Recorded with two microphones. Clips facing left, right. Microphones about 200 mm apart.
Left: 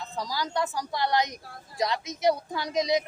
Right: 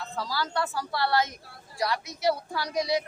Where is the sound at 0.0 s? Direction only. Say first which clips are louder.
Even; 15° left (ahead or behind).